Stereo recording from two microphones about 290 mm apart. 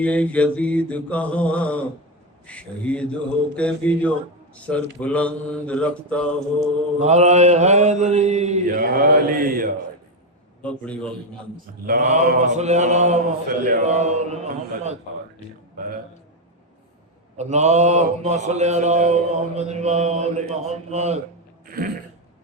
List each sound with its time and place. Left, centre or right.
0.0 s mantra: centre
7.0 s a man's voice: right
10.6 s mantra: centre
11.5 s a man's voice: right
17.3 s a man's voice: right